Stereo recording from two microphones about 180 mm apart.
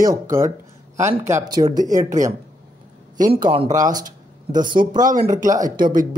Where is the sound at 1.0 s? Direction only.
15° right (ahead or behind).